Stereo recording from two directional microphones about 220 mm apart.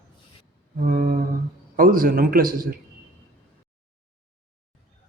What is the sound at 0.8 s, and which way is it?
A man's voice, 40° right (ahead or behind).